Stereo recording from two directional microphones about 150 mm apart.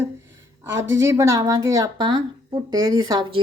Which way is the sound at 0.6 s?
20° right (ahead or behind).